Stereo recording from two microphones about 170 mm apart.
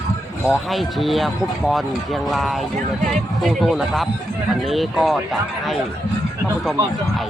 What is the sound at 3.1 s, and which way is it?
Speech, centre (ahead or behind).